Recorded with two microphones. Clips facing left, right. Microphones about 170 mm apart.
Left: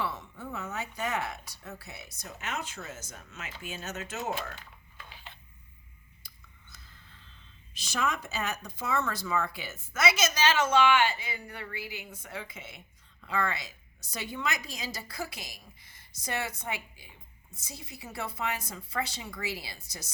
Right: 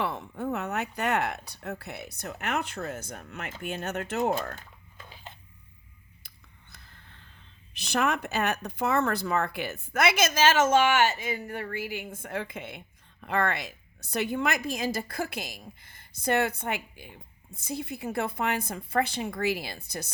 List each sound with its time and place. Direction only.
0.0 s a woman's voice: 55° right (ahead or behind)
6.2 s a sound: 60° right (ahead or behind)
7.7 s a woman's voice: 60° right (ahead or behind)